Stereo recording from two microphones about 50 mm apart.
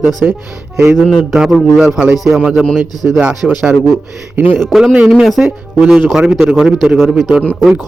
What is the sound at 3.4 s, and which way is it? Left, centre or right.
Speech, centre.